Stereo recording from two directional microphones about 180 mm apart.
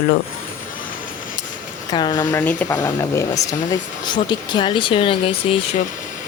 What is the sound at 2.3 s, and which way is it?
Speech, 10° left (ahead or behind).